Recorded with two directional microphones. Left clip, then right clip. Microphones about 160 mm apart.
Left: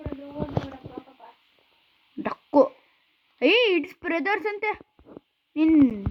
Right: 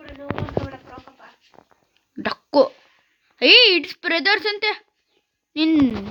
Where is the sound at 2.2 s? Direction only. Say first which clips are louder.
Right 3 dB; 10° right (ahead or behind).